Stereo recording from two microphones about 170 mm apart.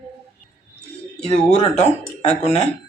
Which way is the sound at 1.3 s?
40° left (ahead or behind).